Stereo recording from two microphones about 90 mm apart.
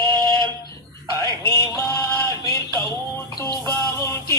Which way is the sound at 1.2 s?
40° left (ahead or behind).